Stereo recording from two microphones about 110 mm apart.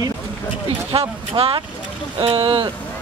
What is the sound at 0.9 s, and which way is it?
Speech, 55° right (ahead or behind).